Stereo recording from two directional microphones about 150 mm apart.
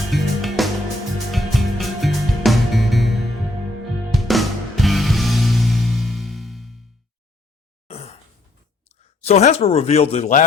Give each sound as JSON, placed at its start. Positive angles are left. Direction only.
{"t": 0.1, "sound": "music", "side_deg": 0}
{"t": 7.9, "sound": "sigh", "side_deg": 40}
{"t": 9.2, "sound": "speech", "side_deg": 45}